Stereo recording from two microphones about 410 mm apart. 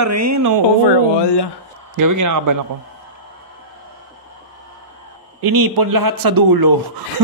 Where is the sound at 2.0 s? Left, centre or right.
Right.